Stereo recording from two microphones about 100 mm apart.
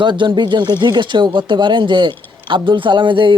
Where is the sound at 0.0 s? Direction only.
50° right (ahead or behind).